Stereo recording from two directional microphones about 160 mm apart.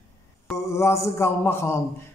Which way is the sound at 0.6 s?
15° left (ahead or behind).